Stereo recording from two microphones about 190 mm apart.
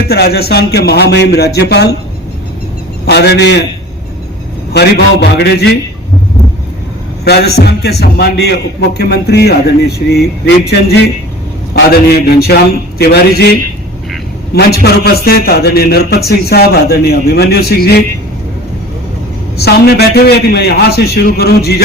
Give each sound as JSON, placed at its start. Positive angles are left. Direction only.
{"t": 0.1, "sound": "a man's voice", "side_deg": 55}
{"t": 3.1, "sound": "a man's voice", "side_deg": 60}
{"t": 4.7, "sound": "a man's voice", "side_deg": 60}
{"t": 7.3, "sound": "a man's voice", "side_deg": 55}
{"t": 19.5, "sound": "a man's voice", "side_deg": 55}